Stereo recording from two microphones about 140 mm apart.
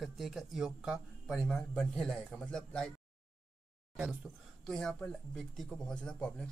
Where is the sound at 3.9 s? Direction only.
10° right (ahead or behind).